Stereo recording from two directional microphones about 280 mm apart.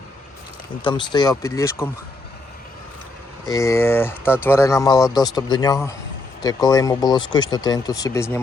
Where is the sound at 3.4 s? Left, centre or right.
Centre.